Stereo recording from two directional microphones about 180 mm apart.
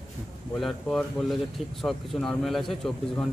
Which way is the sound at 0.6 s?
Centre (ahead or behind).